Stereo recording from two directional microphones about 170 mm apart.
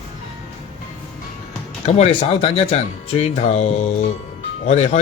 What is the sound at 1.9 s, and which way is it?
Speech, 35° left (ahead or behind).